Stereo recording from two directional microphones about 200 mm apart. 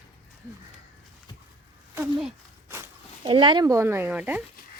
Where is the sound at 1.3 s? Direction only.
20° left (ahead or behind).